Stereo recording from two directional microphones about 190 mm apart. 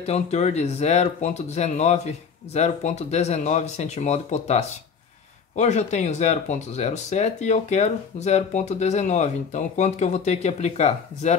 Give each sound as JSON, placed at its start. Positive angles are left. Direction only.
{"t": 0.0, "sound": "speech", "side_deg": 35}